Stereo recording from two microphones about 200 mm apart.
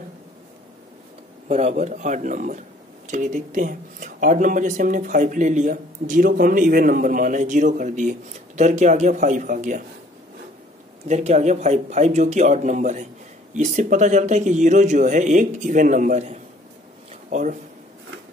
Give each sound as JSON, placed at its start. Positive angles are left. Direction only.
{"t": 1.5, "sound": "speech", "side_deg": -30}
{"t": 11.1, "sound": "speech", "side_deg": -35}